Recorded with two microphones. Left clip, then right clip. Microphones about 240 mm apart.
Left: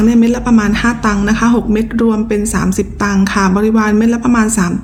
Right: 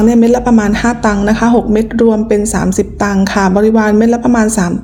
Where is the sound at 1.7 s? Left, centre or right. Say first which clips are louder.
Right 4 dB; centre.